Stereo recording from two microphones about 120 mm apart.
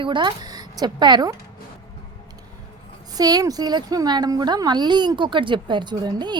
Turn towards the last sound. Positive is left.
turn(degrees=-35)  # may be behind; listen again after turning